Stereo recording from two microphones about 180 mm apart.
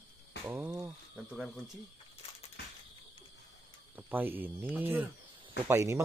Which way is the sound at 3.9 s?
10° right (ahead or behind).